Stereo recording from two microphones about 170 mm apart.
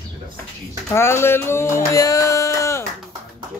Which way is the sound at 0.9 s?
15° left (ahead or behind).